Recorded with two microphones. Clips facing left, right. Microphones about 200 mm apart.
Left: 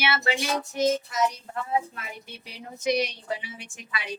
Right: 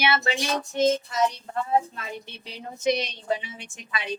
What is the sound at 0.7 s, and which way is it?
A woman's voice, 25° right (ahead or behind).